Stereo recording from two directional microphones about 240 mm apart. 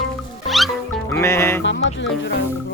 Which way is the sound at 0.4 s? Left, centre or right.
Centre.